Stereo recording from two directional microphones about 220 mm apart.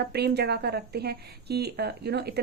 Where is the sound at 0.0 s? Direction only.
50° right (ahead or behind).